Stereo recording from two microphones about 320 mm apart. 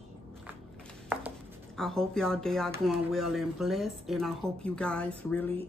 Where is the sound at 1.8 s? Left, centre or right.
Centre.